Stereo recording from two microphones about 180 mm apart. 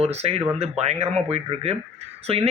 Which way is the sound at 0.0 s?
35° right (ahead or behind).